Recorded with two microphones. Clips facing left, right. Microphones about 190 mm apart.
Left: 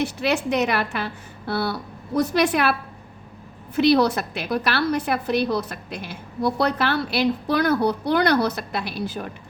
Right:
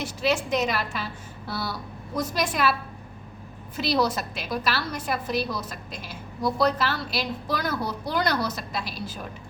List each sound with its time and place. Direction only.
0.0 s a woman's voice: 60° left (ahead or behind)
3.8 s a woman's voice: 65° left (ahead or behind)